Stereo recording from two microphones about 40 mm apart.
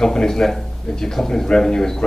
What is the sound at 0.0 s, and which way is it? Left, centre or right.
A man's voice, centre.